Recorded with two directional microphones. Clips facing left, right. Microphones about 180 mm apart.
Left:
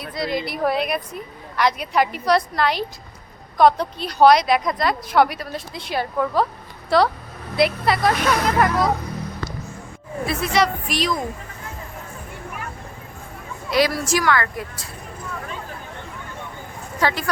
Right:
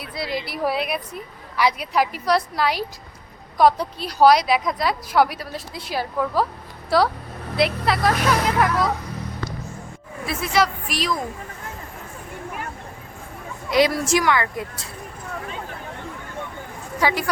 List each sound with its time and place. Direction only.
0.1 s a woman's voice: 5° right (ahead or behind)
10.2 s a woman's voice: centre (ahead or behind)
13.7 s speech: 20° right (ahead or behind)
17.0 s speech: 10° right (ahead or behind)